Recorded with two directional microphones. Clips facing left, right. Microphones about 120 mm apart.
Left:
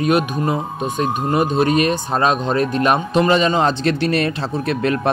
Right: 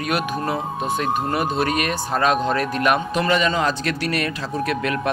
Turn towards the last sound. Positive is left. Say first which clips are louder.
# left 4 dB
turn(degrees=30)  # may be behind; listen again after turning